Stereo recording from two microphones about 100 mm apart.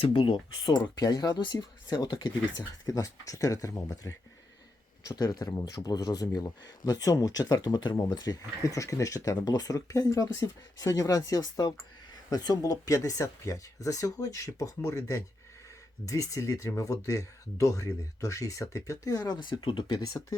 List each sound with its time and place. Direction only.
0.0 s speech: 60° left (ahead or behind)